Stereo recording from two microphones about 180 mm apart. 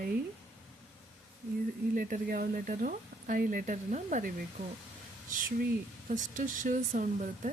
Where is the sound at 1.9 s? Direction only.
50° right (ahead or behind).